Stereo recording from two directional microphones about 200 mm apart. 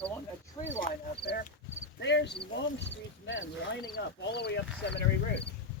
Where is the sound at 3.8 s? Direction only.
55° left (ahead or behind).